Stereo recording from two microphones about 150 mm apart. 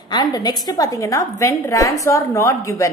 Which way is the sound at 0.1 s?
25° left (ahead or behind).